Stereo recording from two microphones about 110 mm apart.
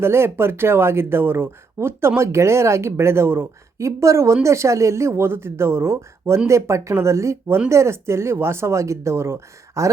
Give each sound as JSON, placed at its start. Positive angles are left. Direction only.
{"t": 0.0, "sound": "speech", "side_deg": -20}